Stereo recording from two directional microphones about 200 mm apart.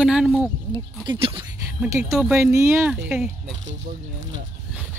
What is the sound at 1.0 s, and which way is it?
Speech, 25° right (ahead or behind).